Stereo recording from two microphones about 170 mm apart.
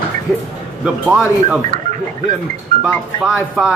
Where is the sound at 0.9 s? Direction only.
5° right (ahead or behind).